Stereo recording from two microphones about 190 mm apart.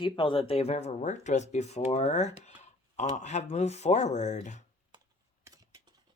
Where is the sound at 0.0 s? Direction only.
25° left (ahead or behind).